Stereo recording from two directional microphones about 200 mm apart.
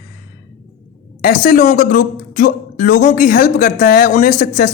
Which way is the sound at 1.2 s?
40° left (ahead or behind).